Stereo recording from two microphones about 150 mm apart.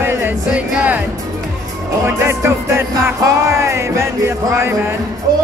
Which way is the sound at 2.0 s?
20° right (ahead or behind).